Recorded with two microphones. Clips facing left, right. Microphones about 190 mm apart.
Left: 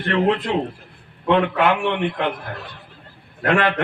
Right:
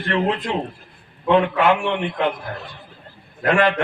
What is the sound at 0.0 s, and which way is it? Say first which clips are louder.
Speech: left 2 dB; 60° left (ahead or behind).